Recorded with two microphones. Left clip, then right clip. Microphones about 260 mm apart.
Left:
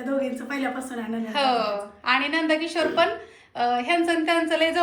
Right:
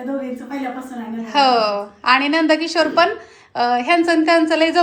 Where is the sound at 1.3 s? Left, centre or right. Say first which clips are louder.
Right 8 dB; centre.